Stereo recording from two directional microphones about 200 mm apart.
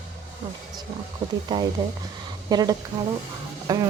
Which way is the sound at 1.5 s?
20° right (ahead or behind).